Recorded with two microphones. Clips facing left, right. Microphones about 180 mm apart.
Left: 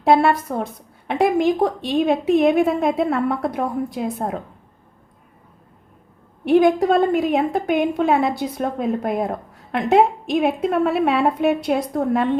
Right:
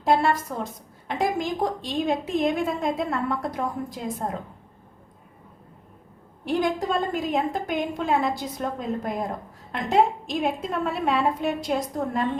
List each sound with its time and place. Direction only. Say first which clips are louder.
0.0 s a woman's voice: left 6 dB; 65° left (ahead or behind)
6.4 s a woman's voice: left 10 dB; 60° left (ahead or behind)